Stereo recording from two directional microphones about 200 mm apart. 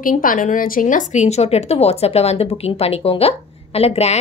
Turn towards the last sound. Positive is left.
turn(degrees=30)  # may be behind; listen again after turning